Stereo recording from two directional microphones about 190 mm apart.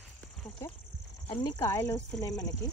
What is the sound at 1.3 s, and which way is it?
Speech, 20° left (ahead or behind).